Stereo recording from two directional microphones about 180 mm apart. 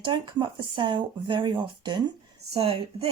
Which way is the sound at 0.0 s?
25° right (ahead or behind).